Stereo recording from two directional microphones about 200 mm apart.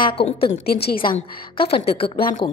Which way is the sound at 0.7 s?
50° left (ahead or behind).